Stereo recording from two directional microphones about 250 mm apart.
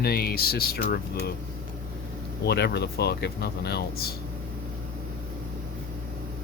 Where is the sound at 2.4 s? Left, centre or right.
Left.